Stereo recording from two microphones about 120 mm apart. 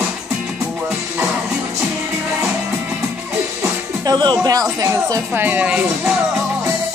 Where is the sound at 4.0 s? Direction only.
35° right (ahead or behind).